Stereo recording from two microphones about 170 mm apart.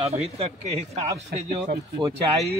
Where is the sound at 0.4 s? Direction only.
40° right (ahead or behind).